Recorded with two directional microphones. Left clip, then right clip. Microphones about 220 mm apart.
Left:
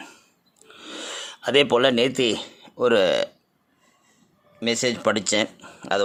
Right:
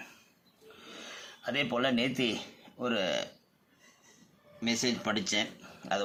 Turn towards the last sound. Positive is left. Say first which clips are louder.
# left 9 dB
turn(degrees=50)  # may be behind; listen again after turning